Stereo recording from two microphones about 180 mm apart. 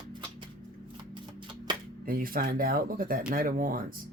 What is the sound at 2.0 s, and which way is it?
Speech, 55° right (ahead or behind).